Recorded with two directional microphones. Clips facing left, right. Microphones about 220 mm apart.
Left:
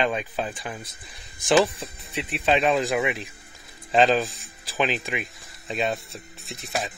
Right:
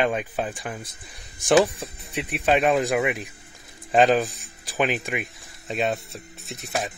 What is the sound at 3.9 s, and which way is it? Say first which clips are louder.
Speech: right 1 dB; 45° right (ahead or behind).